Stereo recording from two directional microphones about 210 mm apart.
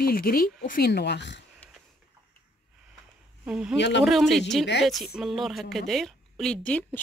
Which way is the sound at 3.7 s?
60° left (ahead or behind).